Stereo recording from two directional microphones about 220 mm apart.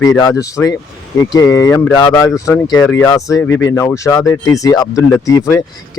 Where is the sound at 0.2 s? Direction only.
15° left (ahead or behind).